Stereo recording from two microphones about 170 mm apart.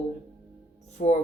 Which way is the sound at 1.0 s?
45° left (ahead or behind).